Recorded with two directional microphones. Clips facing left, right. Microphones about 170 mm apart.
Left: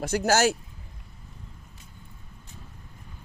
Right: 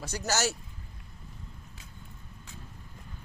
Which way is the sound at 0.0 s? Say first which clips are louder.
Left 9 dB; 55° left (ahead or behind).